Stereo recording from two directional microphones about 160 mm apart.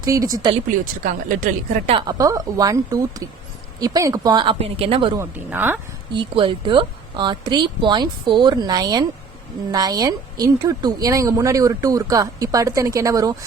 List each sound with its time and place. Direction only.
0.0 s a woman's voice: 20° right (ahead or behind)
1.0 s speech: 60° right (ahead or behind)
1.9 s a woman's voice: 30° right (ahead or behind)
4.5 s a woman's voice: 35° right (ahead or behind)
5.1 s a woman's voice: 15° right (ahead or behind)
6.1 s a woman's voice: 30° right (ahead or behind)